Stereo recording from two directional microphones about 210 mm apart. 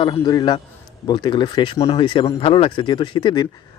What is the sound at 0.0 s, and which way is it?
A man's voice, 20° left (ahead or behind).